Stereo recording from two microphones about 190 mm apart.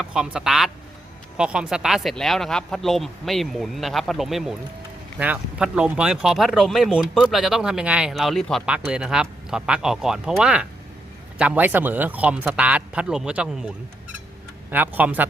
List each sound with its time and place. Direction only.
0.0 s speech: 5° right (ahead or behind)
14.7 s speech: 10° right (ahead or behind)